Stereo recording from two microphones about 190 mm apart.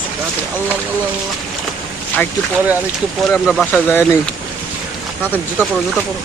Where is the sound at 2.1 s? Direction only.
10° left (ahead or behind).